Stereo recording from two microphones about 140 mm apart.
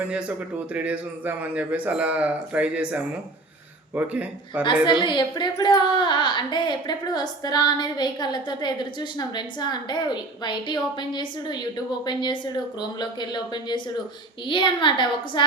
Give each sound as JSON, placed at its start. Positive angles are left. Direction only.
{"t": 0.0, "sound": "a man's voice", "side_deg": -10}
{"t": 4.6, "sound": "speech", "side_deg": 35}